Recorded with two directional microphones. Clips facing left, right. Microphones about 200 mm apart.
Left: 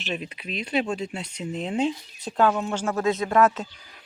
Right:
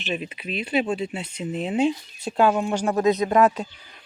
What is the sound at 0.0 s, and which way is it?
Speech, 5° right (ahead or behind).